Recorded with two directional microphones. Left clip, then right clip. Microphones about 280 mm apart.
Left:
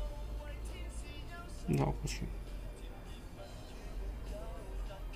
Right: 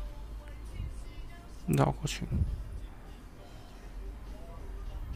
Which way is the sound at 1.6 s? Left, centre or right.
Centre.